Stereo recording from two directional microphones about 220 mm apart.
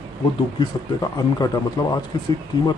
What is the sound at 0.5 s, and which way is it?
Speech, 20° left (ahead or behind).